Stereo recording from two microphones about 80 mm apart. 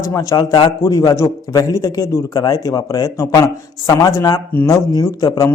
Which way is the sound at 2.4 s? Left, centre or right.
Left.